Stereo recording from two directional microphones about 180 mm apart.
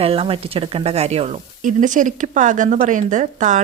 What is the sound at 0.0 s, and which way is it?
A woman's voice, 30° right (ahead or behind).